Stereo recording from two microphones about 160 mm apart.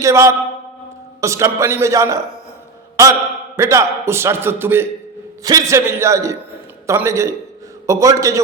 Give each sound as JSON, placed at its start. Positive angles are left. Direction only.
{"t": 0.0, "sound": "a man's voice", "side_deg": -20}
{"t": 3.6, "sound": "a man's voice", "side_deg": -20}